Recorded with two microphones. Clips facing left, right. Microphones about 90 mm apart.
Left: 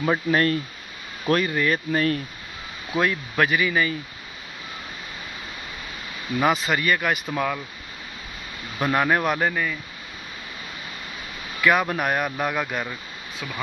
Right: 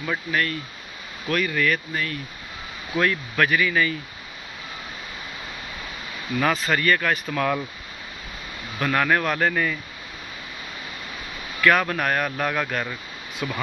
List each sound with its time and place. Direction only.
0.0 s speech: 35° left (ahead or behind)
2.9 s speech: 20° left (ahead or behind)
6.4 s speech: 20° left (ahead or behind)
8.7 s speech: 20° left (ahead or behind)
11.6 s speech: 15° left (ahead or behind); by 13.6 s centre (ahead or behind)